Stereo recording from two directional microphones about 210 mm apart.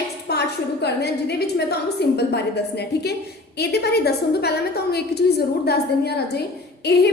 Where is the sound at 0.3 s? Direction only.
50° left (ahead or behind).